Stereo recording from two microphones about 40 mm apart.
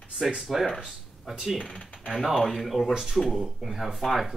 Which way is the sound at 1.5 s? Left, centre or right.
Left.